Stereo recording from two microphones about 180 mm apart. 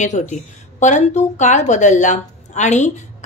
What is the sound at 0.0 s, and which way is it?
A woman's voice, 40° left (ahead or behind).